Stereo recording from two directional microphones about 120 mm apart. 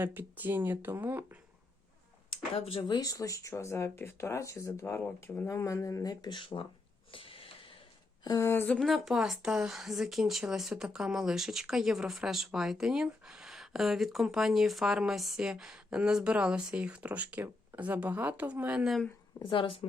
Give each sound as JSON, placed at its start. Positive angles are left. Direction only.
{"t": 0.0, "sound": "speech", "side_deg": -15}
{"t": 2.8, "sound": "speech", "side_deg": 35}
{"t": 5.5, "sound": "speech", "side_deg": 25}
{"t": 7.1, "sound": "a sound", "side_deg": 50}
{"t": 8.2, "sound": "speech", "side_deg": 35}
{"t": 8.4, "sound": "speech", "side_deg": 20}
{"t": 8.7, "sound": "speech", "side_deg": 0}
{"t": 19.5, "sound": "a woman's voice", "side_deg": 45}